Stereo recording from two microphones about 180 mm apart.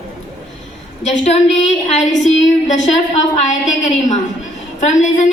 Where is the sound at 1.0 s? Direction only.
40° left (ahead or behind).